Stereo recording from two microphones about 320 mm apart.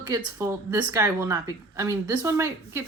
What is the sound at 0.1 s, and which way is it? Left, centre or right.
Speech, centre.